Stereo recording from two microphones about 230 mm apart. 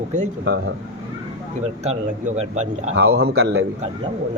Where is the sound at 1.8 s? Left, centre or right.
Right.